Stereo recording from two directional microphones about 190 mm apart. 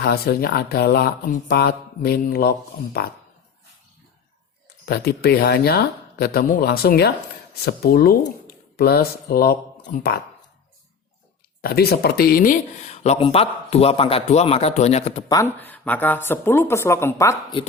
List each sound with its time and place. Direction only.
0.0 s speech: 55° left (ahead or behind)
4.9 s speech: 55° left (ahead or behind)
11.6 s speech: 55° left (ahead or behind); by 15.2 s 35° left (ahead or behind)
15.3 s speech: 15° left (ahead or behind)